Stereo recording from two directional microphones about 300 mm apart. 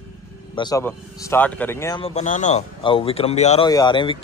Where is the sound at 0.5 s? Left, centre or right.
Centre.